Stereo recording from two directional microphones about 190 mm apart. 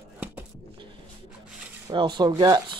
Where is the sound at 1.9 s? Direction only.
25° right (ahead or behind).